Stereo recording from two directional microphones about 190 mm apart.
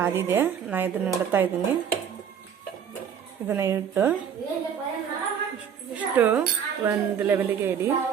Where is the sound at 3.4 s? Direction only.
15° right (ahead or behind).